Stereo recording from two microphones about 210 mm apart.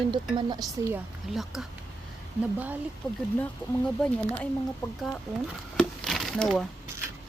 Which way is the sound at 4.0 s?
5° left (ahead or behind).